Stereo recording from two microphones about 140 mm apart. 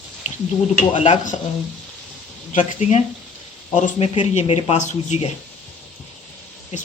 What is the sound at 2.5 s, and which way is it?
Speech, 55° left (ahead or behind).